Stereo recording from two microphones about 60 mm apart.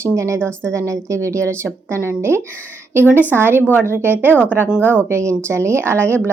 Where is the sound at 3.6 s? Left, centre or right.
Left.